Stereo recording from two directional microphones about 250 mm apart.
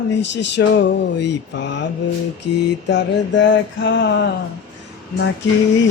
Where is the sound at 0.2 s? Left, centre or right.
Left.